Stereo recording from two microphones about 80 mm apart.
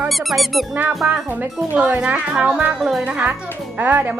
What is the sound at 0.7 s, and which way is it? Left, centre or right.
A woman's voice, centre.